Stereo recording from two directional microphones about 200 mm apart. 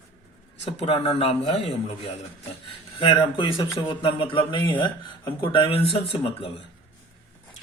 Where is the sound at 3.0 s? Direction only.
25° left (ahead or behind).